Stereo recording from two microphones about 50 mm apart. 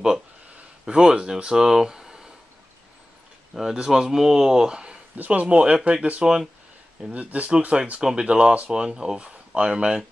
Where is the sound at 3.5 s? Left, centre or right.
Centre.